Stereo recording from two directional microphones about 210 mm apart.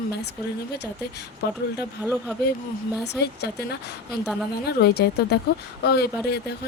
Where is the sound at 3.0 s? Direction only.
50° left (ahead or behind).